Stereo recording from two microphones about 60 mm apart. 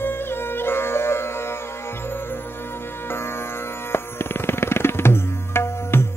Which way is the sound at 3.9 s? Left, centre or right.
Left.